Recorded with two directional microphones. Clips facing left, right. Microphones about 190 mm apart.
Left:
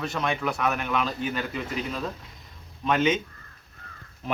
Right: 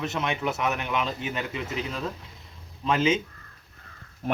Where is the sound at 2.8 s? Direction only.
30° right (ahead or behind).